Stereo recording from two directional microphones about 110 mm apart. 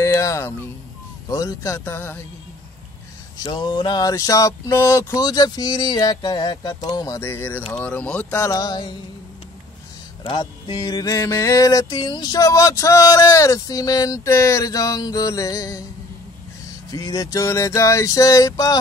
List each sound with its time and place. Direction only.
0.0 s speech: 30° left (ahead or behind)
1.3 s music: 30° left (ahead or behind)
3.4 s music: 40° left (ahead or behind)
7.2 s speech: 20° left (ahead or behind)
8.4 s music: 35° left (ahead or behind)
10.2 s music: 45° left (ahead or behind)
16.9 s music: 35° left (ahead or behind)